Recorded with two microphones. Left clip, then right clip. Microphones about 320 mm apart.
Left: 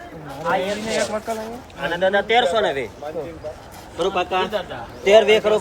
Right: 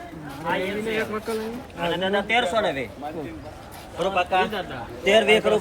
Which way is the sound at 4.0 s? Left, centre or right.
Left.